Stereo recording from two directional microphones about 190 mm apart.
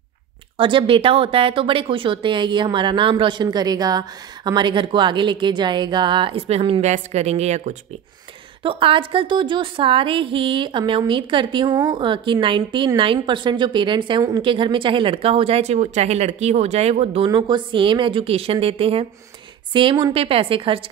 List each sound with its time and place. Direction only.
0.6 s speech: 25° right (ahead or behind)